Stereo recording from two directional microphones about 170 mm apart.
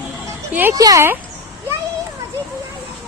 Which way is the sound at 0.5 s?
10° right (ahead or behind).